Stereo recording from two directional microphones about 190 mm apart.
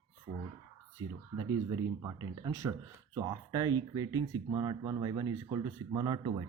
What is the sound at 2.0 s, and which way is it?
Speech, 15° right (ahead or behind).